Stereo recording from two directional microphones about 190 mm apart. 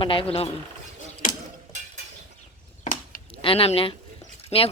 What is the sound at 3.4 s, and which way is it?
Speech, 30° left (ahead or behind).